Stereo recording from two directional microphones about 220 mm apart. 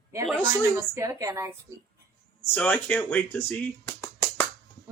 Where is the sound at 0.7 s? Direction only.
15° right (ahead or behind).